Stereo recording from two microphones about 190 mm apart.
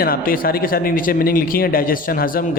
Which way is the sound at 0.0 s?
50° left (ahead or behind).